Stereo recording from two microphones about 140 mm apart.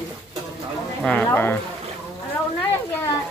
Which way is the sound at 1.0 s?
10° left (ahead or behind).